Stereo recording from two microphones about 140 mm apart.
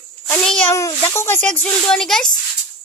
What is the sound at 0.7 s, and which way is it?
A child's voice, 20° left (ahead or behind).